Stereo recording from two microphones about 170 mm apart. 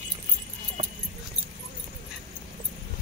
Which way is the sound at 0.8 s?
45° right (ahead or behind).